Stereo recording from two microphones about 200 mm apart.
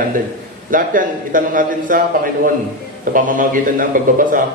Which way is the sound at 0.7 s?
40° right (ahead or behind).